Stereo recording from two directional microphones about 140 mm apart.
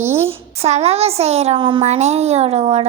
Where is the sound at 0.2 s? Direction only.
45° right (ahead or behind).